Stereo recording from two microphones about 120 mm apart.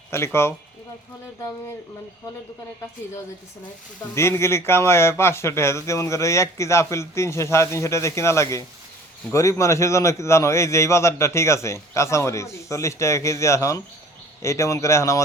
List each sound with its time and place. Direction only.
0.1 s speech: 20° left (ahead or behind)
4.1 s speech: 20° left (ahead or behind)